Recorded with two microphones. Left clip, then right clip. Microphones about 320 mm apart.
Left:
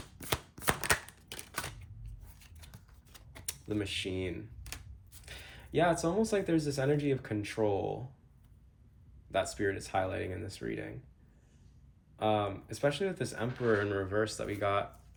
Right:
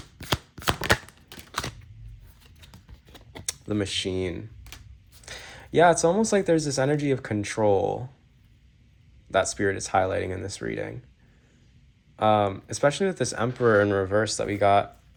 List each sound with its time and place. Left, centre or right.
3.3 s typewriter: centre
5.2 s speech: centre
9.3 s speech: centre
12.1 s speech: centre